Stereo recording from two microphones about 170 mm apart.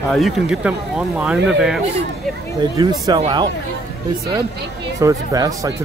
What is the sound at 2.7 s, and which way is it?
Speech, 20° right (ahead or behind).